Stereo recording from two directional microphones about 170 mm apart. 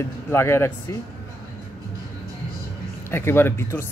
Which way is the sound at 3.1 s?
15° left (ahead or behind).